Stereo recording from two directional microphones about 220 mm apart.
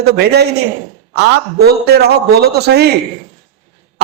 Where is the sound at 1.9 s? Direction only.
45° right (ahead or behind).